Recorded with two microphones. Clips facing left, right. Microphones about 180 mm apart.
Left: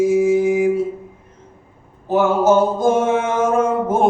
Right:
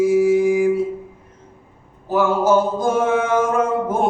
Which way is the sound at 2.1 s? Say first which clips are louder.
Left 2 dB; 25° left (ahead or behind).